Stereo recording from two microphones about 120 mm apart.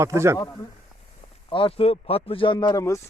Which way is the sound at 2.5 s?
30° left (ahead or behind).